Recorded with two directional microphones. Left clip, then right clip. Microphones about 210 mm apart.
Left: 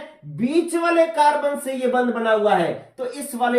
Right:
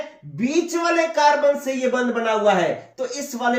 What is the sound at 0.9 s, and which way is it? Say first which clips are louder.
Speech: even; 20° left (ahead or behind).